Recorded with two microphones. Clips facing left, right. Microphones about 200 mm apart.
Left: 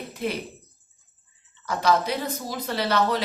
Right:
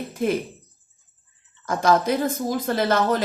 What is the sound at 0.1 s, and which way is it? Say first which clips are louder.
Speech: right 6 dB; 45° right (ahead or behind).